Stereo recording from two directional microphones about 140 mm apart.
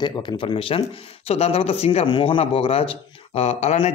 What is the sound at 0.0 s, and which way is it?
Speech, 35° left (ahead or behind).